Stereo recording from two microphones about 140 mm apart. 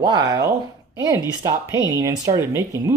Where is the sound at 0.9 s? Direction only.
25° right (ahead or behind).